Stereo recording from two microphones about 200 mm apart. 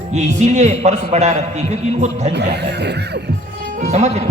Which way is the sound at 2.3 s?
60° right (ahead or behind).